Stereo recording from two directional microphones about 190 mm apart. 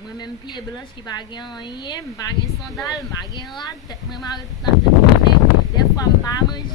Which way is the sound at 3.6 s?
20° left (ahead or behind).